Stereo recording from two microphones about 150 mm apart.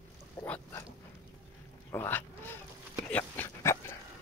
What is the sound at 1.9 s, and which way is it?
Duck, 15° left (ahead or behind).